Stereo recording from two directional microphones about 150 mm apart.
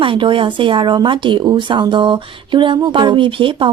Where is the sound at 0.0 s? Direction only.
35° right (ahead or behind).